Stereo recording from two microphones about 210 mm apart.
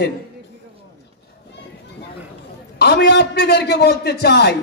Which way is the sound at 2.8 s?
50° left (ahead or behind).